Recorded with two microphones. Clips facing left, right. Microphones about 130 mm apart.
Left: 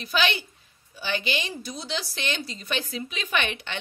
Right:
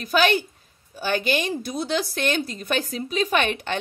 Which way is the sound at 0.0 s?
45° right (ahead or behind).